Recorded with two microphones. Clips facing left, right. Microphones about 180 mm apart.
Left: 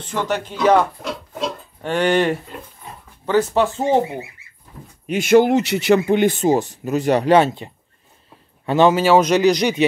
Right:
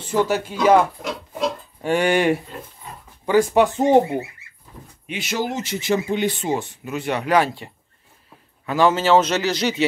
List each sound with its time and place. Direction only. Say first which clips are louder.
0.0 s speech: right 3 dB; 10° right (ahead or behind)
1.8 s speech: left 1 dB; 10° right (ahead or behind)
5.0 s speech: left 12 dB; 50° left (ahead or behind); by 8.9 s 25° left (ahead or behind)
8.9 s speech: left 3 dB; 10° left (ahead or behind)